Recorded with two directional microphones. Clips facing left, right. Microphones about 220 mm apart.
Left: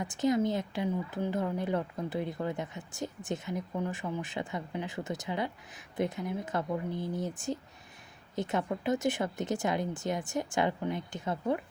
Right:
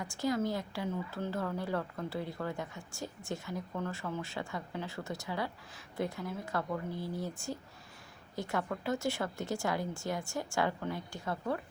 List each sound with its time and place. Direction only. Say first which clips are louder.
0.0 s a woman's voice: left 5 dB; 20° left (ahead or behind)